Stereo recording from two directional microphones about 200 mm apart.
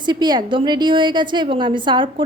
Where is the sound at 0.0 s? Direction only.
20° right (ahead or behind).